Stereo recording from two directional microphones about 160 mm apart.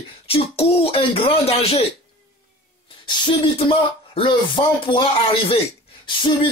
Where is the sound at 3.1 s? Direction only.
35° left (ahead or behind).